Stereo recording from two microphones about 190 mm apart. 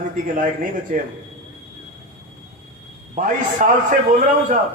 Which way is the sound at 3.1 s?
45° right (ahead or behind).